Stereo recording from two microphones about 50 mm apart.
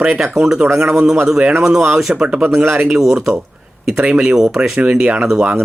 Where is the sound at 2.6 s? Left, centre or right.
Right.